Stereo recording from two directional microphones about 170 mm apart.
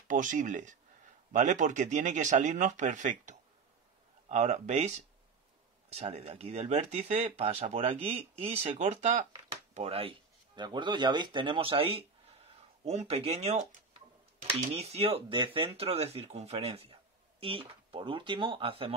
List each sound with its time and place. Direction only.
0.1 s speech: 50° right (ahead or behind); by 18.9 s 35° right (ahead or behind)